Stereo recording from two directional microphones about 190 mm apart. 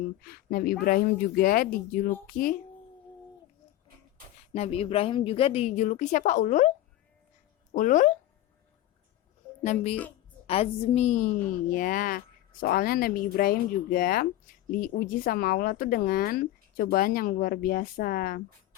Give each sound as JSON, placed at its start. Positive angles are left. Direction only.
{"t": 0.3, "sound": "speech", "side_deg": 50}
{"t": 4.5, "sound": "a woman's voice", "side_deg": 30}
{"t": 9.6, "sound": "a woman's voice", "side_deg": 30}